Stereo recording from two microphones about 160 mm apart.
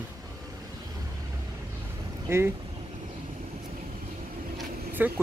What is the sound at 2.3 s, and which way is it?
Speech, 15° right (ahead or behind).